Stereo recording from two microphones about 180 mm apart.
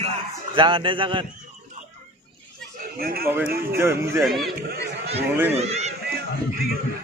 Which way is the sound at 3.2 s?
10° right (ahead or behind).